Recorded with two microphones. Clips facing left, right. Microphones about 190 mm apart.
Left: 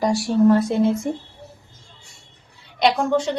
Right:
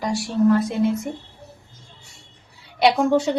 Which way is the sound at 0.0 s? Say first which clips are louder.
Left 3 dB; 40° left (ahead or behind).